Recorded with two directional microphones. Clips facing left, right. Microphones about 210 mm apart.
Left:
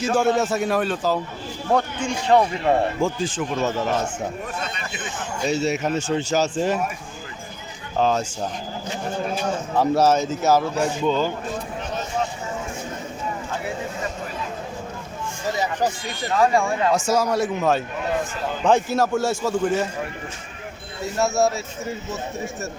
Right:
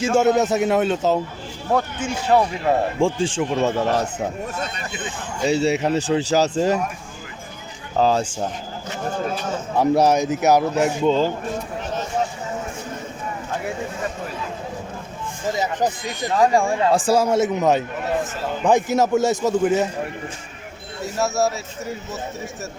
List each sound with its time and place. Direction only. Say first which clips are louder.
0.0 s a man's voice: right 3 dB; 25° right (ahead or behind)
1.7 s speech: even; 5° right (ahead or behind)
3.0 s a man's voice: right 3 dB; 30° right (ahead or behind)
5.5 s speech: right 4 dB; 30° right (ahead or behind)
7.9 s speech: right 2 dB; 35° right (ahead or behind)
9.9 s speech: right 2 dB; 15° right (ahead or behind)
15.5 s speech: right 1 dB; 20° right (ahead or behind)
16.6 s a man's voice: right 3 dB; 30° right (ahead or behind)
21.0 s speech: left 1 dB; centre (ahead or behind)